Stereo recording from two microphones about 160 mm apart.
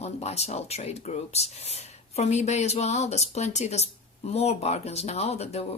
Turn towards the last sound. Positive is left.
turn(degrees=40)  # may be behind; listen again after turning